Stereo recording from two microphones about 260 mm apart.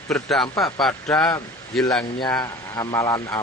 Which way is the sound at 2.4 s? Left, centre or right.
Centre.